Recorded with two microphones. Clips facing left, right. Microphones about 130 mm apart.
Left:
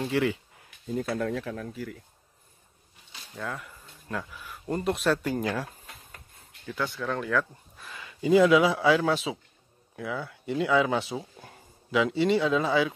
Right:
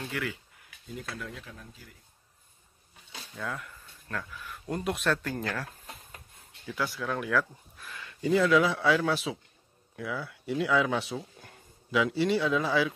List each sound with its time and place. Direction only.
0.0 s speech: 30° left (ahead or behind)
1.0 s speech: 60° left (ahead or behind)
3.3 s speech: 5° left (ahead or behind)
4.6 s speech: centre (ahead or behind)
6.3 s a sound: centre (ahead or behind)
6.7 s speech: 5° right (ahead or behind)